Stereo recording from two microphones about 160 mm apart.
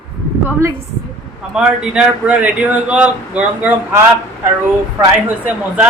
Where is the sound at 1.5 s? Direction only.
5° right (ahead or behind).